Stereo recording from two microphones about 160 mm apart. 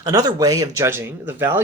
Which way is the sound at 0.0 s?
25° right (ahead or behind).